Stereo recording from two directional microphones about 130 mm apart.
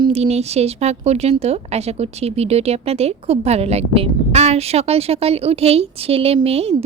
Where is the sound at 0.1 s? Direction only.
55° right (ahead or behind).